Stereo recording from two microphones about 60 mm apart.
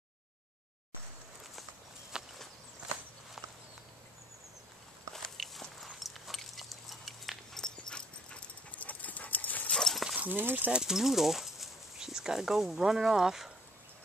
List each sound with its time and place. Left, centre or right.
2.1 s walk: centre
5.1 s dog: centre
7.5 s dog: centre; by 9.7 s left
9.7 s clip-clop: centre
10.1 s speech: right
10.7 s speech: centre